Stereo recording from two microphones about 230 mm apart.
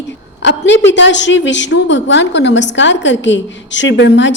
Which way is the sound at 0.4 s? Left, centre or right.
Left.